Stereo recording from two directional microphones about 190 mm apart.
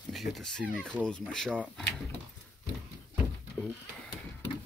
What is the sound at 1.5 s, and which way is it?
Speech, 5° right (ahead or behind).